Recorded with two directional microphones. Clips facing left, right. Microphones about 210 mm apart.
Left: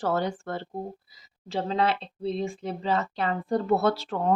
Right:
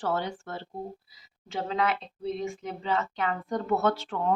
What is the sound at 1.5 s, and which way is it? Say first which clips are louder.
Speech: left 3 dB; 30° left (ahead or behind).